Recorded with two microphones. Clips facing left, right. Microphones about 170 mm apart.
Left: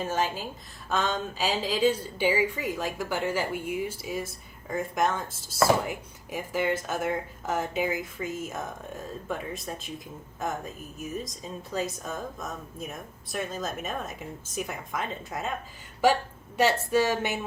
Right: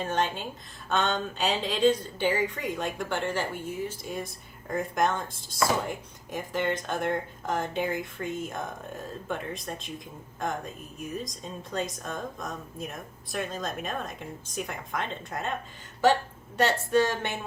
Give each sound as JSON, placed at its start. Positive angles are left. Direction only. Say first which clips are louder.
{"t": 0.0, "sound": "a woman's voice", "louder": "even", "side_deg": 5}